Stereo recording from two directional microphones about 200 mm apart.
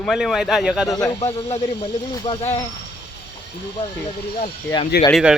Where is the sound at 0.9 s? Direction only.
20° left (ahead or behind).